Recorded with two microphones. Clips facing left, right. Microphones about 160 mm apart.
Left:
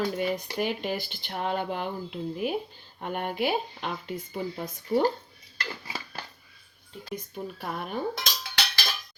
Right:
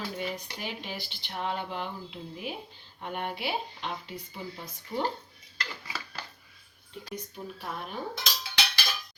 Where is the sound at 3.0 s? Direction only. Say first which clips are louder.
Left 5 dB; 50° left (ahead or behind).